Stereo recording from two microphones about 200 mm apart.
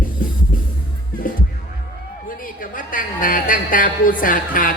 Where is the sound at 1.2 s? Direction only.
45° left (ahead or behind).